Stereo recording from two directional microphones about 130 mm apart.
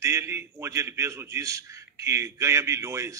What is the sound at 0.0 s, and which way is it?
A man's voice, 20° right (ahead or behind).